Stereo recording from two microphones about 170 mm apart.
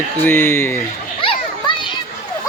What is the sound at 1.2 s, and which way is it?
Children playing, 30° left (ahead or behind).